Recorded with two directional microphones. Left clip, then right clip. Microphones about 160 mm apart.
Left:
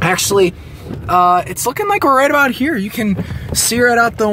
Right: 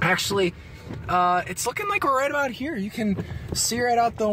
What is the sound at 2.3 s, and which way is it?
Speech, 65° left (ahead or behind).